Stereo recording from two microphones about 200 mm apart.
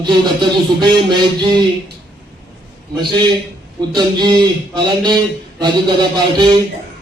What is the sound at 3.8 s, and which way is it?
A man's voice, 20° right (ahead or behind).